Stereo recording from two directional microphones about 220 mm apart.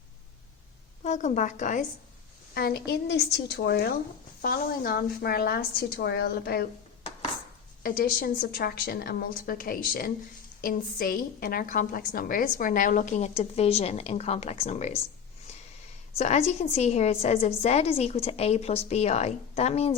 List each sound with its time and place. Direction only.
1.0 s a woman's voice: 35° left (ahead or behind)
2.6 s a woman's voice: 45° left (ahead or behind)
7.8 s a woman's voice: 40° left (ahead or behind)
16.1 s a woman's voice: 30° left (ahead or behind)